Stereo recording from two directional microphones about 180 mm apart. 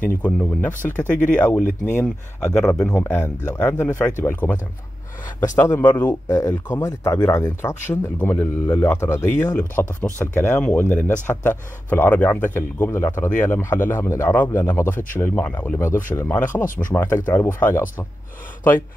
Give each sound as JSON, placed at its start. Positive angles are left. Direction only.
{"t": 0.2, "sound": "speech", "side_deg": 10}
{"t": 1.6, "sound": "speech", "side_deg": 45}
{"t": 2.4, "sound": "speech", "side_deg": 5}
{"t": 5.6, "sound": "speech", "side_deg": 15}